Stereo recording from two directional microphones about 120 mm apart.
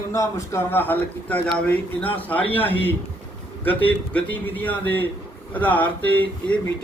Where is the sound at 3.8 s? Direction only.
15° left (ahead or behind).